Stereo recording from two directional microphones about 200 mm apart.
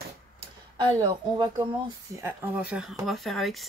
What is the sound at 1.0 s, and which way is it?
Speech, 25° right (ahead or behind).